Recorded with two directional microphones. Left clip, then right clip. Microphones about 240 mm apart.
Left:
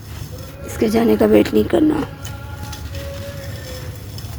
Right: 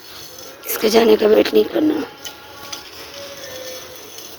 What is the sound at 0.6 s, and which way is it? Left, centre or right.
Speech, right.